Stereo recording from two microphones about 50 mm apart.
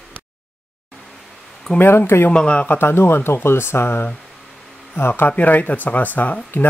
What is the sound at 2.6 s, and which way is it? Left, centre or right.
Speech, left.